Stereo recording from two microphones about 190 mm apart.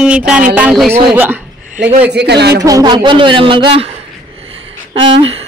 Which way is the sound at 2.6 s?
20° right (ahead or behind).